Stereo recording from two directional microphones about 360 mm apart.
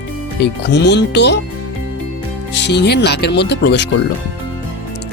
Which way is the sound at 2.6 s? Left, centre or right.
Left.